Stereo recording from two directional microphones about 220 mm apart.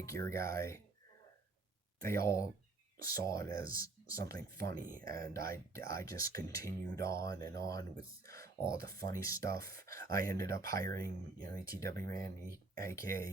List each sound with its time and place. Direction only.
0.0 s speech: 15° left (ahead or behind)
2.0 s speech: 10° left (ahead or behind)